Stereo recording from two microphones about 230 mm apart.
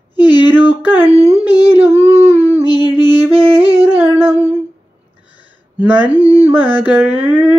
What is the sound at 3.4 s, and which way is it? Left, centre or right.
Yodeling, right.